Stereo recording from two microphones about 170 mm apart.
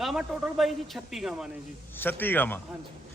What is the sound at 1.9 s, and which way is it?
Speech, 10° left (ahead or behind).